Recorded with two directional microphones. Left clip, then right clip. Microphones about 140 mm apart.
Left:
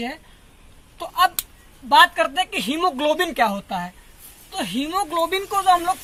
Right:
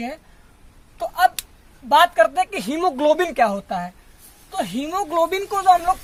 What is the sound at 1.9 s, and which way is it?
A woman's voice, 90° right.